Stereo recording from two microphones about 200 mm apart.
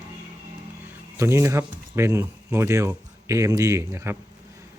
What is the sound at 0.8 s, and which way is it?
Speech, 15° right (ahead or behind).